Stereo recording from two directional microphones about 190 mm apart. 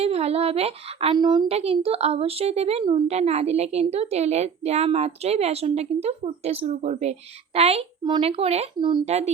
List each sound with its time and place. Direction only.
0.0 s speech: 30° right (ahead or behind)